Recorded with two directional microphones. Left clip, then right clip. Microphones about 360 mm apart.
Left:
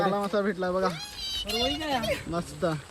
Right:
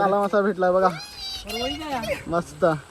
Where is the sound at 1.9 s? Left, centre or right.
Centre.